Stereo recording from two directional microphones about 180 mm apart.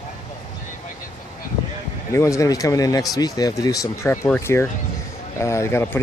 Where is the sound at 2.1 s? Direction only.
15° left (ahead or behind).